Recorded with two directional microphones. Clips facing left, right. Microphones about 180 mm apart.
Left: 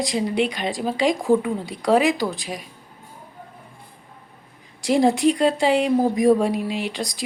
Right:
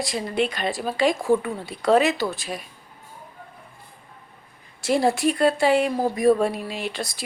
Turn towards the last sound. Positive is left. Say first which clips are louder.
# left 3 dB
turn(degrees=15)  # may be behind; listen again after turning